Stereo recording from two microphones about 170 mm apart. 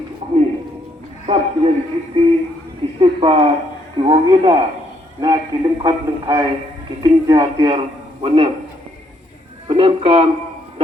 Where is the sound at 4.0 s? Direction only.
30° right (ahead or behind).